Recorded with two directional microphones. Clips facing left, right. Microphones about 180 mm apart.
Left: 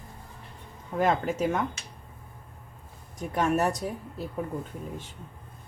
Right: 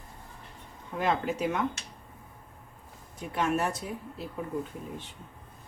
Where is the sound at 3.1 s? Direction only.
40° left (ahead or behind).